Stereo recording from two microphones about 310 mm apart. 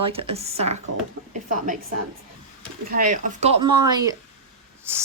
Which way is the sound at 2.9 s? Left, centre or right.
Right.